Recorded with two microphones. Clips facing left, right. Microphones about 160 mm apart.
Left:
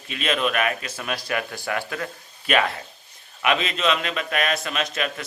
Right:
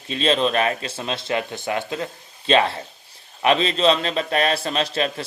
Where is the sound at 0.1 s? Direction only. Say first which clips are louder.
Right 4 dB; 30° right (ahead or behind).